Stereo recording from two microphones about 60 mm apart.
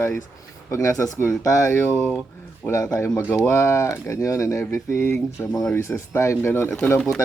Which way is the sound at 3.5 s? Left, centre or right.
Left.